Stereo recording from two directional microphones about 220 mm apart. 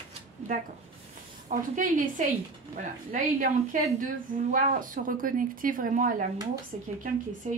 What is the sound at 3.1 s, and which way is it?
A woman's voice, 35° right (ahead or behind).